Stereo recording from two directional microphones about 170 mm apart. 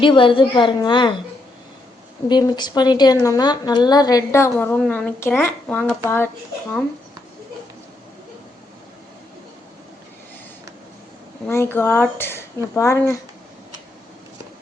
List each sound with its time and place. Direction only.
0.0 s a woman's voice: 30° left (ahead or behind)
2.3 s a woman's voice: 25° left (ahead or behind)
11.4 s speech: 15° left (ahead or behind)